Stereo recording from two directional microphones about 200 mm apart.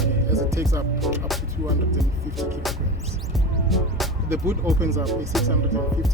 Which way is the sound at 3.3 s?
Centre (ahead or behind).